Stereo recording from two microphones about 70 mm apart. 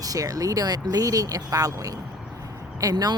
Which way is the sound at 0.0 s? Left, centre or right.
Right.